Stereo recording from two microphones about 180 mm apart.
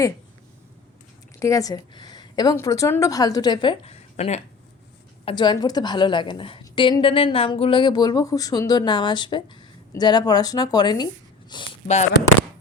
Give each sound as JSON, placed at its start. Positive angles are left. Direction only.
{"t": 1.4, "sound": "a woman's voice", "side_deg": 20}